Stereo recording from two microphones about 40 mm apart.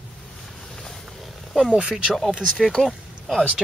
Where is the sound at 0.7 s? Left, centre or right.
Centre.